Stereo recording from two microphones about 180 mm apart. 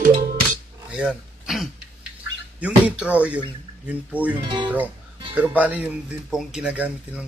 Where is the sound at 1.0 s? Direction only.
5° right (ahead or behind).